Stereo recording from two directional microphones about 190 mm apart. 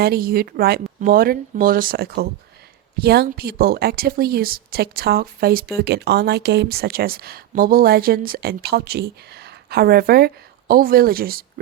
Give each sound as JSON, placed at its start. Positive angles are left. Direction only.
{"t": 0.0, "sound": "speech", "side_deg": -55}